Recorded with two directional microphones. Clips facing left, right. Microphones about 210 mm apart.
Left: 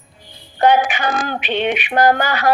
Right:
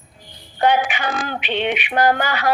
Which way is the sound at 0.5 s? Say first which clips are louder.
Left 3 dB; 45° left (ahead or behind).